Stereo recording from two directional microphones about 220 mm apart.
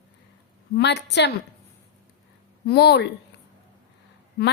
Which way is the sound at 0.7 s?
50° left (ahead or behind).